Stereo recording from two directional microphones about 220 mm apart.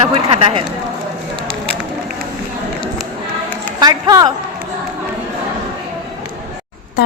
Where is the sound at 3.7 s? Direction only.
15° right (ahead or behind).